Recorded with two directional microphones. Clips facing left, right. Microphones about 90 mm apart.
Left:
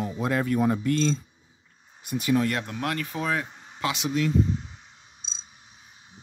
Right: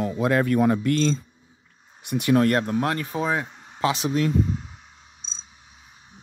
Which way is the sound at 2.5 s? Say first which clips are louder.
Right 7 dB; 45° right (ahead or behind).